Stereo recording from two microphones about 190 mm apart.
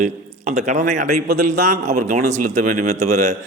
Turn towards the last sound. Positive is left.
turn(degrees=-35)  # may be behind; listen again after turning